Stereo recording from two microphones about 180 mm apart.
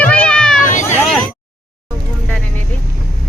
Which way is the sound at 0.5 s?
45° left (ahead or behind).